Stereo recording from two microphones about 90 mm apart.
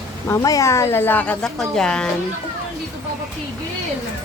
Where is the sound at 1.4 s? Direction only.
5° left (ahead or behind).